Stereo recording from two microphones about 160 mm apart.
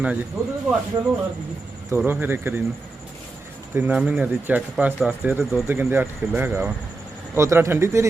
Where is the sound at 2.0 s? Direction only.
10° right (ahead or behind).